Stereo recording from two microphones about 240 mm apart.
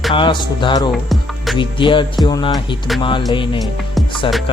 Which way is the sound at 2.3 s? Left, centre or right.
Centre.